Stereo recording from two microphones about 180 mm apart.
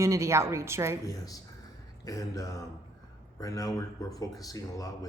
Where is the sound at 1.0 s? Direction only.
20° left (ahead or behind).